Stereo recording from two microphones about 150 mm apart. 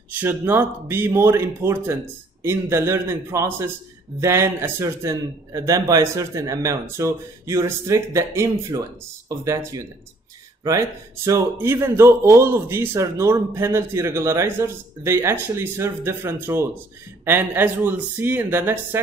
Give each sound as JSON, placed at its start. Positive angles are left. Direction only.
{"t": 0.1, "sound": "a man's voice", "side_deg": -15}